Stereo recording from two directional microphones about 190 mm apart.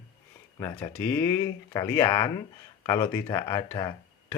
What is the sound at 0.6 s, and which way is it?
Speech, 15° left (ahead or behind).